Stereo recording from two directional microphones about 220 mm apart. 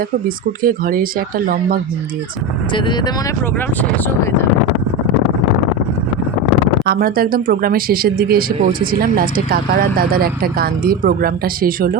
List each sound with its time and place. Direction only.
0.6 s speech: 40° right (ahead or behind)
6.8 s speech: 40° right (ahead or behind)